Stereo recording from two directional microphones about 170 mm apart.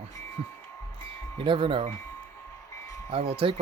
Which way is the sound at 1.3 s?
30° right (ahead or behind).